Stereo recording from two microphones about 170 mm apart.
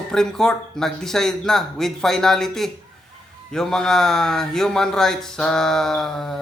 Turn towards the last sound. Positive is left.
turn(degrees=0)  # may be behind; listen again after turning